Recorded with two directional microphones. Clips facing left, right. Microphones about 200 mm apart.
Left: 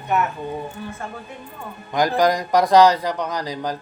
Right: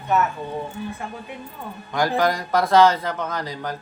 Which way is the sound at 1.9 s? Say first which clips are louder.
Left 3 dB; 15° left (ahead or behind).